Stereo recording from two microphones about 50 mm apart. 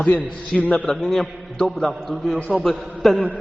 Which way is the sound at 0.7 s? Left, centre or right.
Centre.